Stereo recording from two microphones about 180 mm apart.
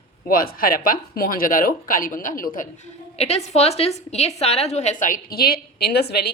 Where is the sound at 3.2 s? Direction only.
35° left (ahead or behind); by 6.3 s 60° left (ahead or behind).